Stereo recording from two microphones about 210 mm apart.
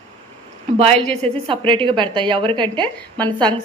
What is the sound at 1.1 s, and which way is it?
A woman's voice, 30° right (ahead or behind).